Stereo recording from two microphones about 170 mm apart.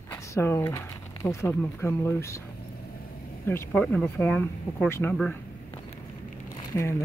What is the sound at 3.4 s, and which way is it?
Speech, 10° left (ahead or behind).